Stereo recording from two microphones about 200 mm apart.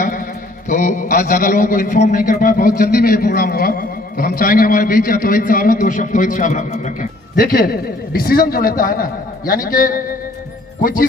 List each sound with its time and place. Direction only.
0.7 s a man's voice: 40° left (ahead or behind)